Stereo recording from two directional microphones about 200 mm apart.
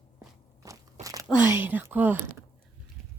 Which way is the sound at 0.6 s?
15° right (ahead or behind).